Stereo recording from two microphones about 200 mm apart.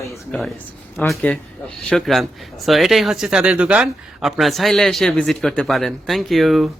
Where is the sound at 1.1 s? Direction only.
5° left (ahead or behind).